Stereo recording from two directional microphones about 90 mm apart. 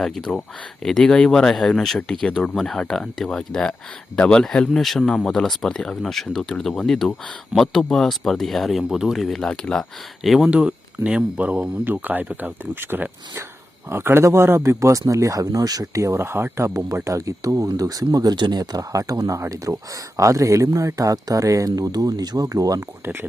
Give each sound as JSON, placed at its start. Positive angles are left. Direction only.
{"t": 0.0, "sound": "speech", "side_deg": 0}
{"t": 10.2, "sound": "speech", "side_deg": -5}